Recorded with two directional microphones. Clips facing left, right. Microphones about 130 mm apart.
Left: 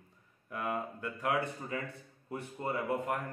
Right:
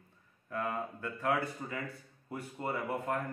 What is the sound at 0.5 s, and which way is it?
A man's voice, 15° left (ahead or behind).